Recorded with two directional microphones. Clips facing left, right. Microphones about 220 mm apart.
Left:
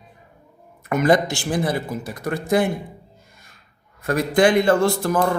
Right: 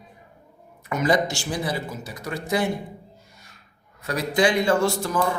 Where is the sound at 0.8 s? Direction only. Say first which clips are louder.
Left 4 dB; 50° left (ahead or behind).